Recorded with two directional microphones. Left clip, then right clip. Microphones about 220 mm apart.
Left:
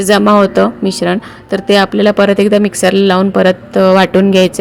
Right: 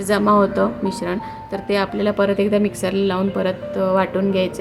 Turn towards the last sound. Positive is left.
turn(degrees=40)  # may be behind; listen again after turning